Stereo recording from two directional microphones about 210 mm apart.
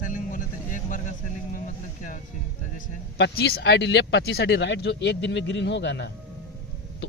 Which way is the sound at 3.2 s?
50° left (ahead or behind).